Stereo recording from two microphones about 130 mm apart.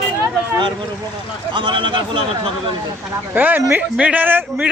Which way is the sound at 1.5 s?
40° right (ahead or behind).